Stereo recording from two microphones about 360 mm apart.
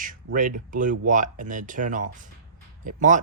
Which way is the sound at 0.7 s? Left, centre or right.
Right.